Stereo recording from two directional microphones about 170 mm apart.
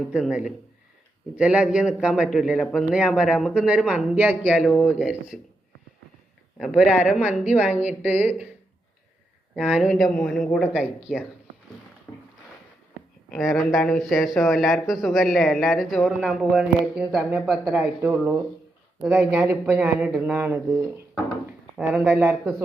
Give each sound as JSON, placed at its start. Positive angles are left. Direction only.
{"t": 0.0, "sound": "speech", "side_deg": -5}
{"t": 4.5, "sound": "speech", "side_deg": 5}
{"t": 4.9, "sound": "speech", "side_deg": -5}
{"t": 6.6, "sound": "a man's voice", "side_deg": 0}
{"t": 9.6, "sound": "speech", "side_deg": -5}
{"t": 12.1, "sound": "a sound", "side_deg": 10}
{"t": 13.3, "sound": "a man's voice", "side_deg": 0}